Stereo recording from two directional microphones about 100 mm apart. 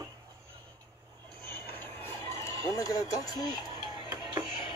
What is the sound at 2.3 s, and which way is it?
Speech, 30° left (ahead or behind).